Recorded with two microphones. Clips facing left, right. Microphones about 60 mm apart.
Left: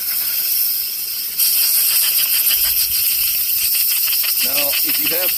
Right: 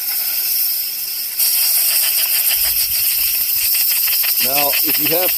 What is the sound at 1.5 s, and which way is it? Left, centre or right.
Steam, right.